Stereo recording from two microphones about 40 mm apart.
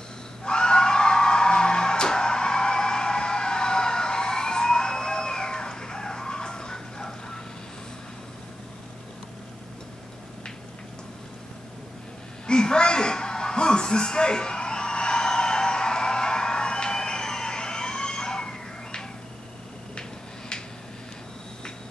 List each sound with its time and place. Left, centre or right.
0.5 s music: left
12.4 s music: left
20.0 s a sound: centre